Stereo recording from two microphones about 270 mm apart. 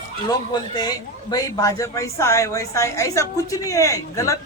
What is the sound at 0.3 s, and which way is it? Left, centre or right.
A man's voice, centre.